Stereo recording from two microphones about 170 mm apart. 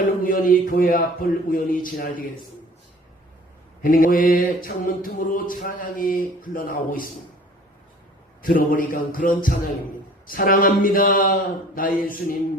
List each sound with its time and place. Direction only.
0.2 s mantra: 55° left (ahead or behind)
3.8 s mantra: 55° left (ahead or behind)
8.4 s a sound: 55° left (ahead or behind)
10.2 s mantra: 60° left (ahead or behind)